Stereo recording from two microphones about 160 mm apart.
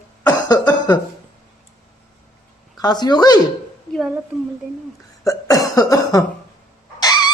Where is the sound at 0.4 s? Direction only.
25° left (ahead or behind).